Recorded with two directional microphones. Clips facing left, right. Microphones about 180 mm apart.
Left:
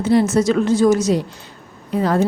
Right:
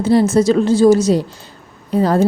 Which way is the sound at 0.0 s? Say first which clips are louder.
Right 3 dB; 35° right (ahead or behind).